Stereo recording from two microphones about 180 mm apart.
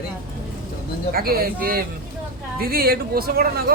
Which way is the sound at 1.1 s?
55° right (ahead or behind).